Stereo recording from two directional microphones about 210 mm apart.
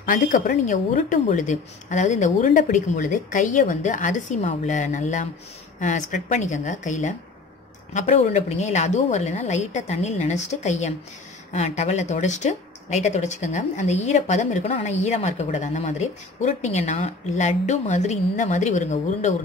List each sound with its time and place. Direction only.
0.0 s speech: 40° left (ahead or behind)